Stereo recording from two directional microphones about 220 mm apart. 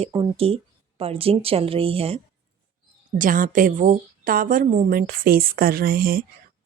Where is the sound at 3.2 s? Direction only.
40° right (ahead or behind).